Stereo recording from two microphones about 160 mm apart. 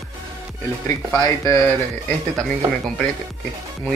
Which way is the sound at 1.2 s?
20° left (ahead or behind).